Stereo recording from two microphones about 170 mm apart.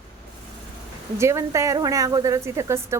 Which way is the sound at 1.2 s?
15° right (ahead or behind).